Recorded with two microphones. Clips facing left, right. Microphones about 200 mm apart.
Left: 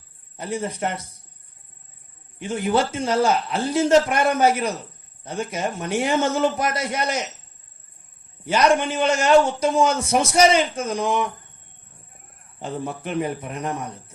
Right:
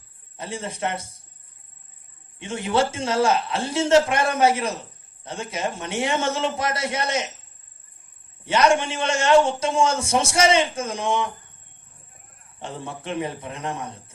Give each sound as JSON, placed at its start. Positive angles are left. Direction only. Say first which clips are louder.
{"t": 0.3, "sound": "a man's voice", "louder": "left 4 dB", "side_deg": -25}
{"t": 2.4, "sound": "a man's voice", "louder": "left 1 dB", "side_deg": -25}
{"t": 8.4, "sound": "a man's voice", "louder": "left 1 dB", "side_deg": -25}
{"t": 13.2, "sound": "a man's voice", "louder": "left 3 dB", "side_deg": -25}